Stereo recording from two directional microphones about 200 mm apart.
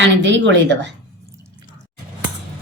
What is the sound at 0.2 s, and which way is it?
Speech, 65° right (ahead or behind).